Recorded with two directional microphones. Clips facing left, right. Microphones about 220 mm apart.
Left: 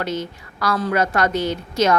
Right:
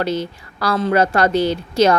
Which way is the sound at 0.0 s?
30° right (ahead or behind).